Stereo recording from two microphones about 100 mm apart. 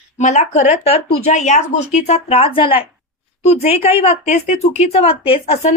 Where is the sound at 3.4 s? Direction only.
90° left; by 4.1 s 75° left (ahead or behind).